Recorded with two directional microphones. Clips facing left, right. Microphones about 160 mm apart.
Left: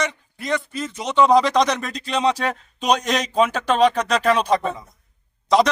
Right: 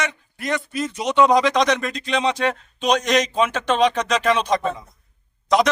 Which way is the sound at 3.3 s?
40° left (ahead or behind).